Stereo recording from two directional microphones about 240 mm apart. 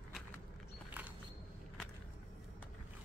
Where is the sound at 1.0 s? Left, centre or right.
Centre.